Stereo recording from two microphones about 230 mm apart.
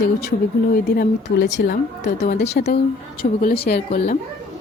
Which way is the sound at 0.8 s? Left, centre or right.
Left.